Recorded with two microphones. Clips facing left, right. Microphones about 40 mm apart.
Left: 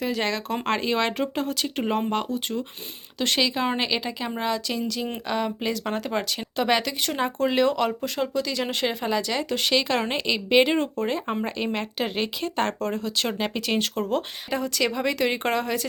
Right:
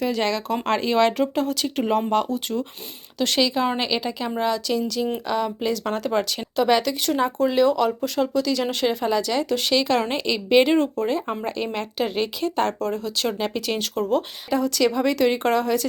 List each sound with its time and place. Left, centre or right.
0.0 s a woman's voice: centre
7.3 s speech: left
8.0 s a woman's voice: left
10.9 s a woman's voice: left
12.5 s speech: left
13.2 s speech: left
14.0 s speech: left
14.5 s a woman's voice: left